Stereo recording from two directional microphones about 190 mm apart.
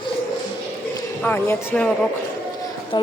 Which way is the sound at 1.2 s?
10° left (ahead or behind).